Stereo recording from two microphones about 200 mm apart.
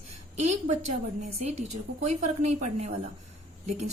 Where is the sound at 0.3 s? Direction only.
35° right (ahead or behind).